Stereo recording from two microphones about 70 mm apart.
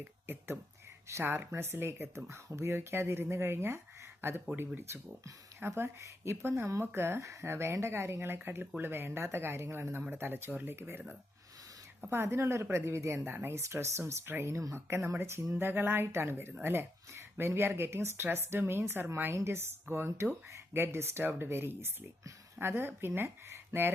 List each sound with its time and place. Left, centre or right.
0.0 s speech: right
12.0 s speech: right
13.2 s speech: right
14.5 s speech: right